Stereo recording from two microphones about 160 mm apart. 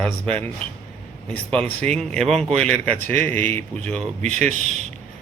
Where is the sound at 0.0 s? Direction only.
10° left (ahead or behind).